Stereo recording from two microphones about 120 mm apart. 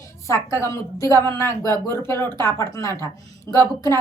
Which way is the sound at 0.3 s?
25° left (ahead or behind).